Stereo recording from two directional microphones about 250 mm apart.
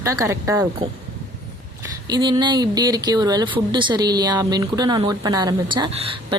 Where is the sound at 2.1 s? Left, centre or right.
Centre.